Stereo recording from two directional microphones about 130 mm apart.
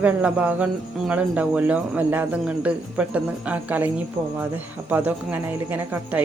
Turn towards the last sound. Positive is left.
turn(degrees=-15)  # may be behind; listen again after turning